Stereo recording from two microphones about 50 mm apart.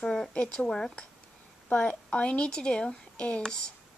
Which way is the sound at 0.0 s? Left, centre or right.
Centre.